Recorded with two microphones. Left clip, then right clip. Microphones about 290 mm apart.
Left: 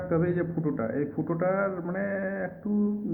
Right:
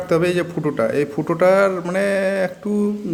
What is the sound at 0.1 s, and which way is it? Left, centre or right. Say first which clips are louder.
A man's voice: right 10 dB; right.